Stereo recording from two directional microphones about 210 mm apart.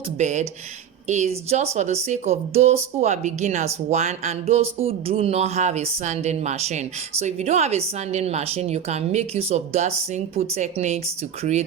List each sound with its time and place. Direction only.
0.2 s speech: 35° right (ahead or behind)